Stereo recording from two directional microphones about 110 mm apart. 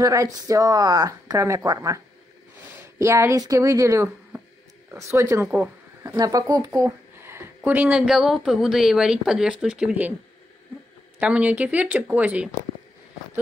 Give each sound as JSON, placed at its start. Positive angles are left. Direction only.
{"t": 0.0, "sound": "speech", "side_deg": -30}
{"t": 3.0, "sound": "speech", "side_deg": -25}
{"t": 6.7, "sound": "speech", "side_deg": -25}
{"t": 11.1, "sound": "speech", "side_deg": -10}